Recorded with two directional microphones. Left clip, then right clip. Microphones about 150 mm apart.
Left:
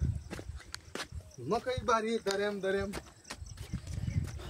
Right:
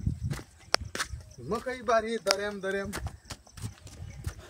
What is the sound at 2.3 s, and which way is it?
Speech, 15° right (ahead or behind).